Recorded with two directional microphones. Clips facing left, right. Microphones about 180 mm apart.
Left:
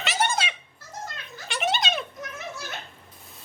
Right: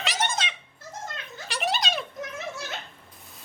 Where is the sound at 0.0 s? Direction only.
5° left (ahead or behind).